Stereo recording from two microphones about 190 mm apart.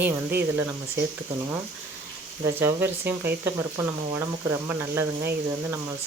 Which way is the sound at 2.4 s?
15° right (ahead or behind).